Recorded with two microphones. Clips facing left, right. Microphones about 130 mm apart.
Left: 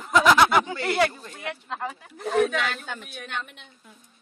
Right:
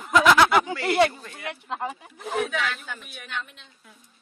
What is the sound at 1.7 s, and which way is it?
Speech, 15° right (ahead or behind).